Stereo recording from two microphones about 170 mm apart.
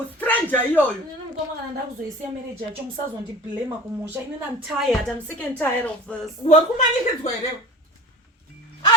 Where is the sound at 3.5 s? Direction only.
10° right (ahead or behind).